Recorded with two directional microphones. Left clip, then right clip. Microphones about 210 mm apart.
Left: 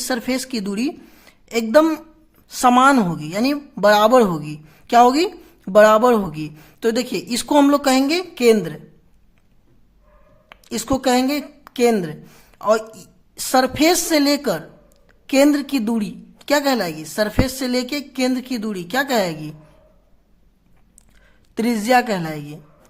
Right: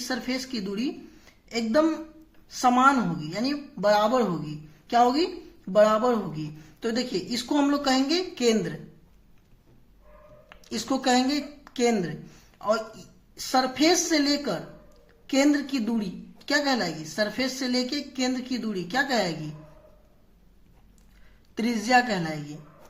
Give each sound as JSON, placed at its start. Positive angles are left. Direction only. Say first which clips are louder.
{"t": 0.1, "sound": "a woman's voice", "louder": "left 8 dB", "side_deg": 40}
{"t": 10.5, "sound": "a woman's voice", "louder": "left 7 dB", "side_deg": 35}
{"t": 21.5, "sound": "a woman's voice", "louder": "left 6 dB", "side_deg": 35}